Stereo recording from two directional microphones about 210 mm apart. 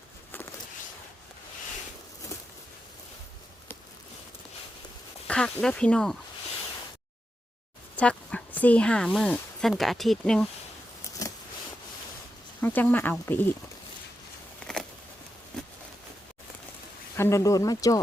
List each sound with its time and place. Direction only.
0.3 s a sound: 10° left (ahead or behind)
5.3 s speech: 5° left (ahead or behind)
7.9 s speech: 5° left (ahead or behind)
12.6 s speech: 10° left (ahead or behind)
14.6 s a sound: 5° left (ahead or behind)
17.2 s speech: 15° left (ahead or behind)